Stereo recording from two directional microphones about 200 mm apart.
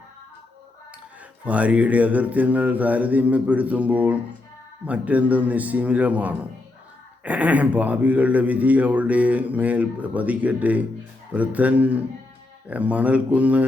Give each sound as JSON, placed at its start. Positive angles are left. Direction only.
{"t": 1.5, "sound": "speech", "side_deg": -5}